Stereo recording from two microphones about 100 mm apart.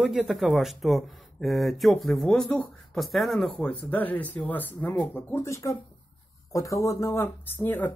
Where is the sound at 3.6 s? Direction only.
15° left (ahead or behind).